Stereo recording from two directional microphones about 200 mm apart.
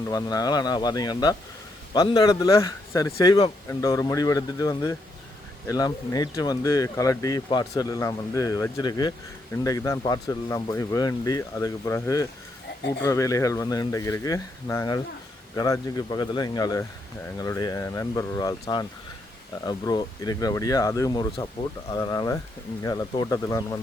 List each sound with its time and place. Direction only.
0.1 s speech: 20° left (ahead or behind)